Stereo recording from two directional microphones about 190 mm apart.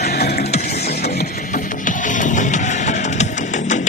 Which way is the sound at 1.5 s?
45° left (ahead or behind).